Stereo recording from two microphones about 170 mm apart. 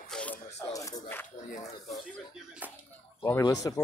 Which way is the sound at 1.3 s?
50° left (ahead or behind).